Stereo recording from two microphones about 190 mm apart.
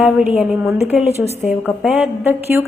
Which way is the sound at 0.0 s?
Centre (ahead or behind).